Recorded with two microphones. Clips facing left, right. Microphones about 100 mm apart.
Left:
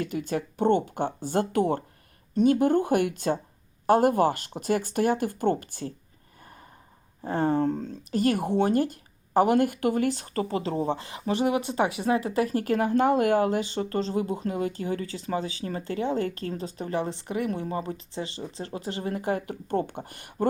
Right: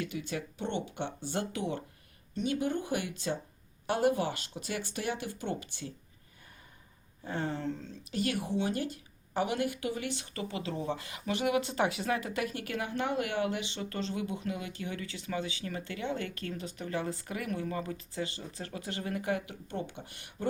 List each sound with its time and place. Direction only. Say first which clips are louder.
0.0 s speech: left 7 dB; 45° left (ahead or behind)
7.2 s speech: left 11 dB; 45° left (ahead or behind)